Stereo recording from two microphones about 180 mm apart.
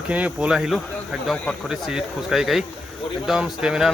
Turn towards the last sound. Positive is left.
turn(degrees=-5)  # may be behind; listen again after turning